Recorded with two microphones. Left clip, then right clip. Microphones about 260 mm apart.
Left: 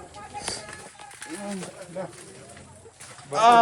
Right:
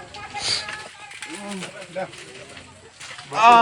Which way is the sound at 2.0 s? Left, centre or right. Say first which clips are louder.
Right 5 dB; left.